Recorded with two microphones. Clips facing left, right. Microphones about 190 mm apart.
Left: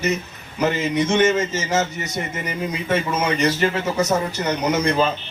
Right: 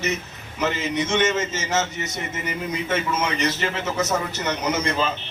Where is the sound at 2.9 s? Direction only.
35° left (ahead or behind).